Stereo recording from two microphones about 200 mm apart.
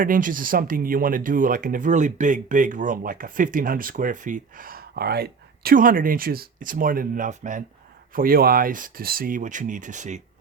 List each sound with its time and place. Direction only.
0.0 s speech: 40° right (ahead or behind)